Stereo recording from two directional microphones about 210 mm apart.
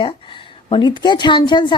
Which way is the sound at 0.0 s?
25° left (ahead or behind).